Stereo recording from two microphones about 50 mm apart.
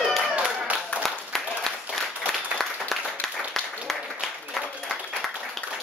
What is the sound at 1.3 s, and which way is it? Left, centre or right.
Applause, centre.